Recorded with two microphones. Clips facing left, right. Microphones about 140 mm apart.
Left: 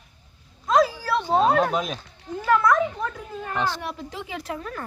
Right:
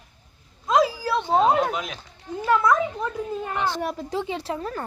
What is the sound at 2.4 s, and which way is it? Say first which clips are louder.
A child's voice: even; 20° right (ahead or behind).